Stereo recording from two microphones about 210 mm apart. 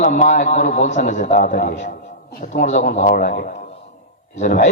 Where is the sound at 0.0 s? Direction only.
35° left (ahead or behind).